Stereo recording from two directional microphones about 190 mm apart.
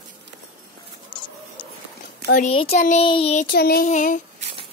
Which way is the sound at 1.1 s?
5° left (ahead or behind).